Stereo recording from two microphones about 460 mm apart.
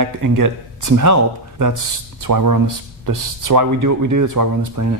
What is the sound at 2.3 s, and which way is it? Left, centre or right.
Speech, right.